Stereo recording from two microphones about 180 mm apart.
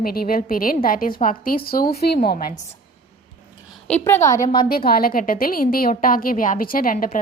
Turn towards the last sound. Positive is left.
turn(degrees=50)  # may be behind; listen again after turning